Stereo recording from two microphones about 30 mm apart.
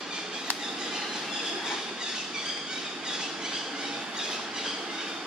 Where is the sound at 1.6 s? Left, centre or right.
Centre.